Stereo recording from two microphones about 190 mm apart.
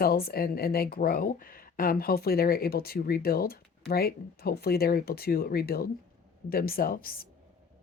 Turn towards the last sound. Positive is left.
turn(degrees=50)  # may be behind; listen again after turning